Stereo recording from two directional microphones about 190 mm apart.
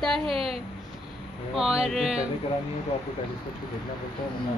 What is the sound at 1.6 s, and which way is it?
Speech, 5° right (ahead or behind).